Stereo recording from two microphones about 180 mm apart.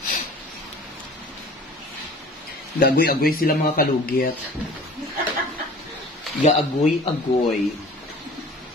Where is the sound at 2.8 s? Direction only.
60° left (ahead or behind).